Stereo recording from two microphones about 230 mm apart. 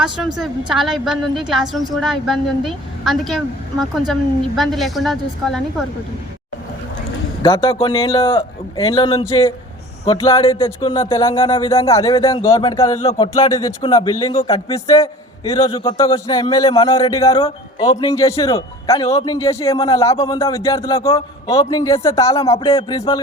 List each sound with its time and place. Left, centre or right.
0.3 s a woman's voice: centre
7.5 s a man's voice: left
11.4 s a man's voice: left
11.7 s speech: centre
13.0 s a man's voice: left
19.3 s a man's voice: centre